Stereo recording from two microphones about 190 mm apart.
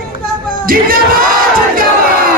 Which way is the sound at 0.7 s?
50° right (ahead or behind).